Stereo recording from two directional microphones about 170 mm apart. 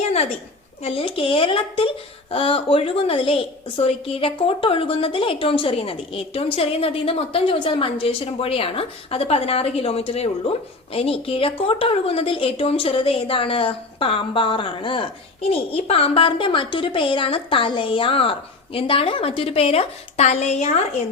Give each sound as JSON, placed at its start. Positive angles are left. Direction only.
{"t": 0.8, "sound": "speech", "side_deg": 35}